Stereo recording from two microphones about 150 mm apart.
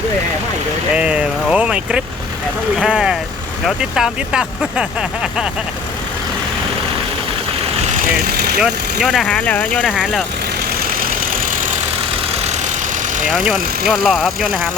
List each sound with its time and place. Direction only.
0.9 s speech: 5° right (ahead or behind)
7.9 s speech: 65° right (ahead or behind); by 8.6 s 90° right
8.6 s speech: 5° right (ahead or behind)
9.2 s speech: 10° left (ahead or behind)
9.8 s speech: 5° right (ahead or behind)
12.4 s vehicle: 45° right (ahead or behind)
13.1 s speech: 60° right (ahead or behind)
13.8 s speech: centre (ahead or behind)